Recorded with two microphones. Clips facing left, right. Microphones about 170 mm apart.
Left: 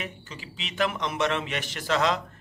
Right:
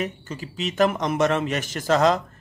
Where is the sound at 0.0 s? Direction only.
45° right (ahead or behind).